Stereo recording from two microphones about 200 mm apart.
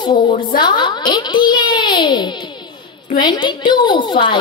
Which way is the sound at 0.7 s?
20° left (ahead or behind).